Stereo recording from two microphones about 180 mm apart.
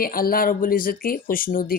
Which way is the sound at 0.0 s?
55° left (ahead or behind).